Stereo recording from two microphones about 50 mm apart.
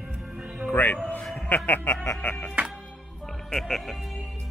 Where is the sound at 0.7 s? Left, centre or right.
Left.